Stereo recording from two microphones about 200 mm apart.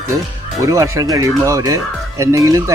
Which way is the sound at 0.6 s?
15° right (ahead or behind).